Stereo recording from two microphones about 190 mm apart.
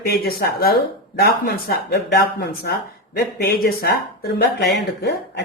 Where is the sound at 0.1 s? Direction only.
55° left (ahead or behind).